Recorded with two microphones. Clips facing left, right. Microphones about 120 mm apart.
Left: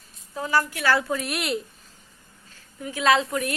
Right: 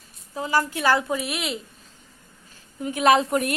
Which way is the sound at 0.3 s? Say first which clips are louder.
Right 1 dB; 15° right (ahead or behind).